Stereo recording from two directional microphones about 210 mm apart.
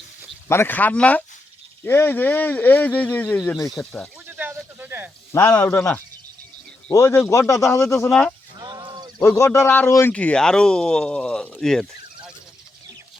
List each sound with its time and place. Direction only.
0.4 s speech: 10° left (ahead or behind)
4.3 s snake: 10° right (ahead or behind)
5.3 s speech: 10° left (ahead or behind)
8.5 s a sound: 20° right (ahead or behind)
9.2 s speech: 10° left (ahead or behind)